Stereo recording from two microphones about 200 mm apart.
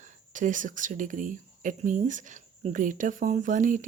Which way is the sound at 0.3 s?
40° right (ahead or behind).